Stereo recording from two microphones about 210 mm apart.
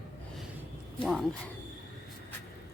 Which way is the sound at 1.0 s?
Centre (ahead or behind).